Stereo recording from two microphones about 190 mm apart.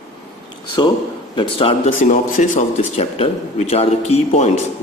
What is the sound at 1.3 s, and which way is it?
Speech, 30° left (ahead or behind).